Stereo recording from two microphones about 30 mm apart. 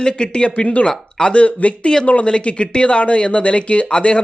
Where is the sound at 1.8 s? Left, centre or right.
Left.